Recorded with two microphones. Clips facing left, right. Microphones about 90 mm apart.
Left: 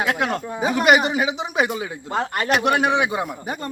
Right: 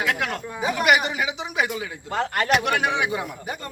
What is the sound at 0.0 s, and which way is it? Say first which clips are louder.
Speech: left 3 dB; 30° left (ahead or behind).